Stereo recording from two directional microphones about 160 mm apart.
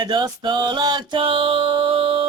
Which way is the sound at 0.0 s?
30° right (ahead or behind).